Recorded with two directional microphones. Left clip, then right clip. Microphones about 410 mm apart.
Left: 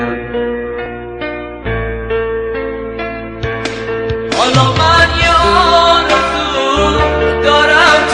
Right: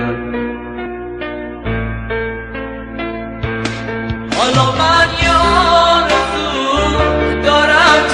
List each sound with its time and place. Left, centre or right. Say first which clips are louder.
4.3 s music: left 1 dB; centre